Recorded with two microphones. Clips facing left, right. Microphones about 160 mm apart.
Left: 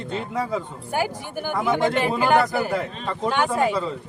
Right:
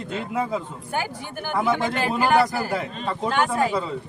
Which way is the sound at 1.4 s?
15° left (ahead or behind).